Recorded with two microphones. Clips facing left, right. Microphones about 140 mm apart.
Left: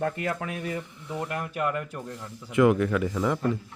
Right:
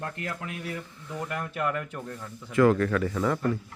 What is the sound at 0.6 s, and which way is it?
Speech, 20° left (ahead or behind).